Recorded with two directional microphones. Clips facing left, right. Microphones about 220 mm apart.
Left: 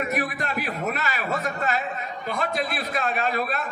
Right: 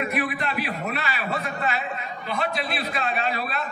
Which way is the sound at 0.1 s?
45° left (ahead or behind).